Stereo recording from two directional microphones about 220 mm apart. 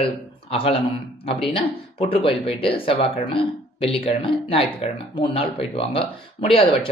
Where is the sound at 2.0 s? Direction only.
25° left (ahead or behind).